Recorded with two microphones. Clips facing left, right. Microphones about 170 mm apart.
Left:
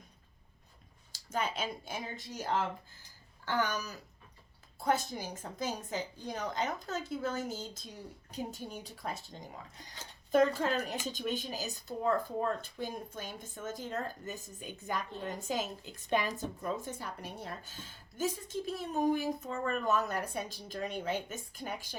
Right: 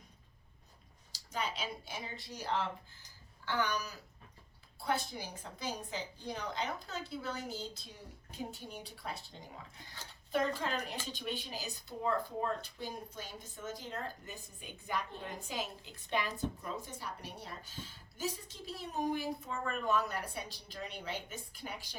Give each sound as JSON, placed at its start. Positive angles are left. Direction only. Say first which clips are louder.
{"t": 1.1, "sound": "a woman's voice", "louder": "left 4 dB", "side_deg": 50}
{"t": 10.3, "sound": "a woman's voice", "louder": "left 6 dB", "side_deg": 45}